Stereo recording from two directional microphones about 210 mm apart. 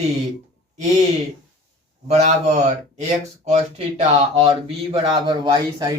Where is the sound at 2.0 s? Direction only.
30° right (ahead or behind).